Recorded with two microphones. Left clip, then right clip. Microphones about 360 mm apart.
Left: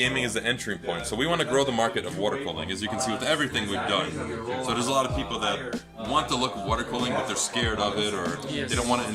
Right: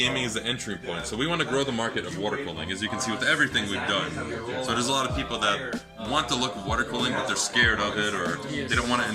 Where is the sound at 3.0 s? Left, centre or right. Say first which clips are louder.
Right 2 dB; centre.